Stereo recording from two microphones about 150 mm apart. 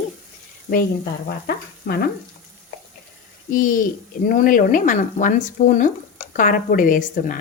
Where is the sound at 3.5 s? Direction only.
65° left (ahead or behind).